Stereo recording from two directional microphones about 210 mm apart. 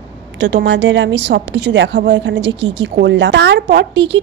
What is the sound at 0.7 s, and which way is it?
A woman's voice, 60° right (ahead or behind).